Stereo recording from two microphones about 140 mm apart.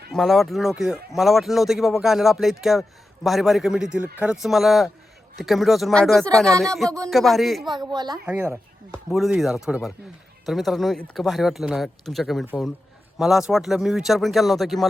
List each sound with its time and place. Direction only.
0.1 s speech: centre (ahead or behind)
7.7 s speech: 30° right (ahead or behind)
8.3 s speech: 15° right (ahead or behind)
9.0 s speech: centre (ahead or behind)